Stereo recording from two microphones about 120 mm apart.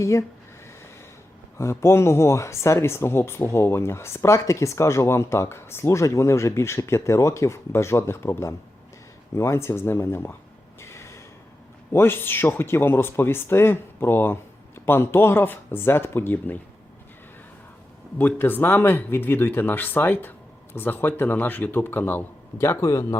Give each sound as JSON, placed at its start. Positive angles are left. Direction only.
{"t": 0.0, "sound": "speech", "side_deg": 25}
{"t": 1.5, "sound": "speech", "side_deg": 25}
{"t": 10.8, "sound": "a sound", "side_deg": 25}
{"t": 11.9, "sound": "speech", "side_deg": 20}
{"t": 18.2, "sound": "a man's voice", "side_deg": 15}